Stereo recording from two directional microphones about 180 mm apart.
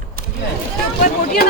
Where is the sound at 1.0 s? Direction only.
55° left (ahead or behind).